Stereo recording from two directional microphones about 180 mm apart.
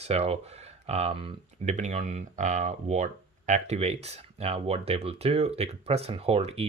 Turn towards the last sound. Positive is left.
turn(degrees=-35)  # may be behind; listen again after turning